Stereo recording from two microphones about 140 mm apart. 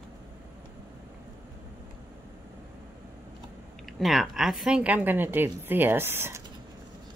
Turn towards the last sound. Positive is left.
turn(degrees=-15)  # may be behind; listen again after turning